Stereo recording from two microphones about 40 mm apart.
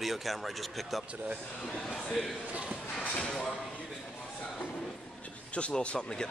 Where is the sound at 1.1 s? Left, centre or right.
Right.